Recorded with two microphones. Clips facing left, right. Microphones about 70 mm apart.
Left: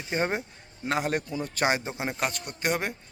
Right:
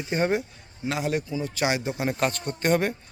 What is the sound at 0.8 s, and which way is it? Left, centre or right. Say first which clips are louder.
A man's voice: right 1 dB; left.